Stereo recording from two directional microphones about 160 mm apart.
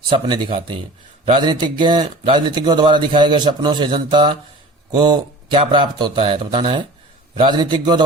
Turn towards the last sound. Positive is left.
turn(degrees=-30)  # may be behind; listen again after turning